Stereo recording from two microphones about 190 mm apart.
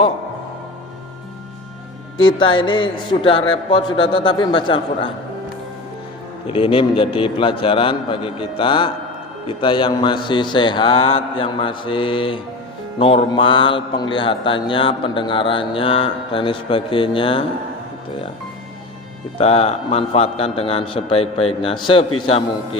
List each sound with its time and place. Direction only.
2.1 s a man's voice: 25° left (ahead or behind)
6.5 s a man's voice: 30° left (ahead or behind)
19.4 s a man's voice: 35° left (ahead or behind)